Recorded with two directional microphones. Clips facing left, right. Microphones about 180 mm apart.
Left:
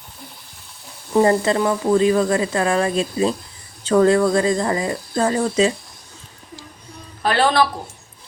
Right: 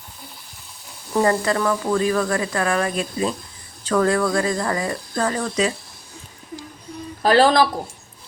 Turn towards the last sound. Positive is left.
turn(degrees=-35)  # may be behind; listen again after turning